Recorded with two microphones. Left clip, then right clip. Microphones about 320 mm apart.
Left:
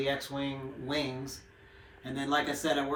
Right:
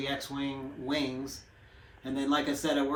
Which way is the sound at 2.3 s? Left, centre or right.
Centre.